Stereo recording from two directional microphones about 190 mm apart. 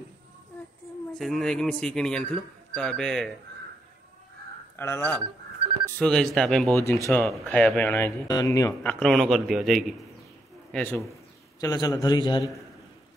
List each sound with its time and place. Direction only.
1.1 s speech: centre (ahead or behind)
4.7 s speech: 10° left (ahead or behind)
9.0 s speech: centre (ahead or behind)
11.6 s a man's voice: 20° left (ahead or behind)